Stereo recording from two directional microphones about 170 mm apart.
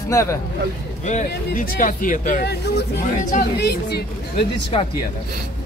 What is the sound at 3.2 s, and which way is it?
Speech, 50° left (ahead or behind).